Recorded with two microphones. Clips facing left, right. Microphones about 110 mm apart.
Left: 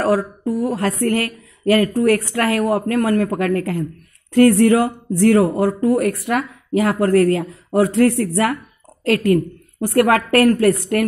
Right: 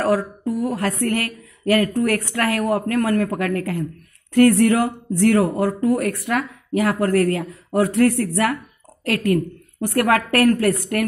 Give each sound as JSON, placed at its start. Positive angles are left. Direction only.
{"t": 0.0, "sound": "a woman's voice", "side_deg": 30}
{"t": 4.4, "sound": "a woman's voice", "side_deg": 20}
{"t": 9.0, "sound": "a woman's voice", "side_deg": 30}